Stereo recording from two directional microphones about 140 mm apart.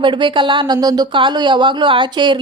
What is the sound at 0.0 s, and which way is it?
Speech, 35° right (ahead or behind).